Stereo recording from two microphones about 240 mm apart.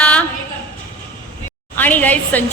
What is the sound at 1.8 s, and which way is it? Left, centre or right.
Speech, centre.